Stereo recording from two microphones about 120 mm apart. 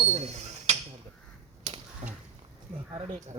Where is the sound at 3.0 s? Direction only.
70° right (ahead or behind).